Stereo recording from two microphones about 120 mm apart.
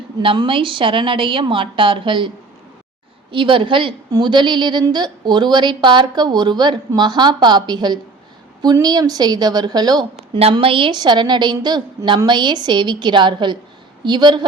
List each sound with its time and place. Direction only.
0.2 s a woman's voice: 45° right (ahead or behind)
3.3 s a woman's voice: 45° right (ahead or behind)
10.5 s a woman's voice: 45° right (ahead or behind)